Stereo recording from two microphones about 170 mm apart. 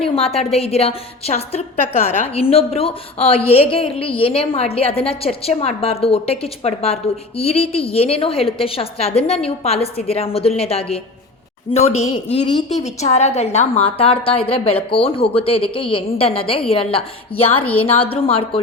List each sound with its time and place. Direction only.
0.0 s a woman's voice: 35° left (ahead or behind)